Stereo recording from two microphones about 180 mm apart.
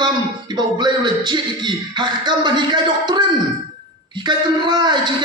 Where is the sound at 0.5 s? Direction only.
25° right (ahead or behind).